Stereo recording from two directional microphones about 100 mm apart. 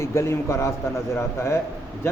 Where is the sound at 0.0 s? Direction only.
30° left (ahead or behind).